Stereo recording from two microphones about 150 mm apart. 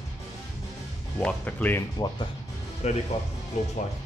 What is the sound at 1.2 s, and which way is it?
Speech, 10° left (ahead or behind).